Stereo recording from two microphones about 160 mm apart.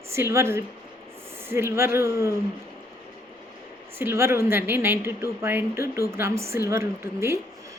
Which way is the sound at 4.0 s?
15° right (ahead or behind).